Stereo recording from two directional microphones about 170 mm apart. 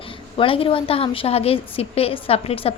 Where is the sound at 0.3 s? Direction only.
30° left (ahead or behind).